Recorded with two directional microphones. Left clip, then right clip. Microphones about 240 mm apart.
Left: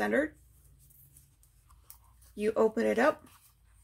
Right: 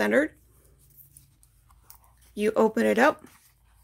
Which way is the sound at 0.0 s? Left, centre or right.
Right.